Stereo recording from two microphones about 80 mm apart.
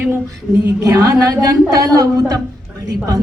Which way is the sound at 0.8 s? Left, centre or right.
Right.